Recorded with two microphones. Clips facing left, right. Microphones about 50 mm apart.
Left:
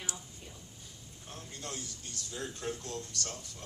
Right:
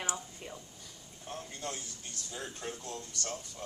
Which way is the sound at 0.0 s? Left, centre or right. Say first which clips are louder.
Right 6 dB; right.